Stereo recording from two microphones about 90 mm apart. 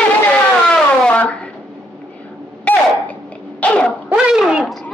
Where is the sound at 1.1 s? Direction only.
15° left (ahead or behind).